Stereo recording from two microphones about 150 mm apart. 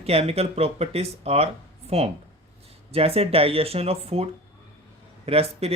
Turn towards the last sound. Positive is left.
turn(degrees=-40)  # may be behind; listen again after turning